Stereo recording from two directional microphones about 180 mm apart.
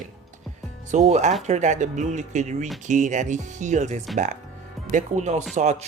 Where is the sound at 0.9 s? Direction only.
40° right (ahead or behind).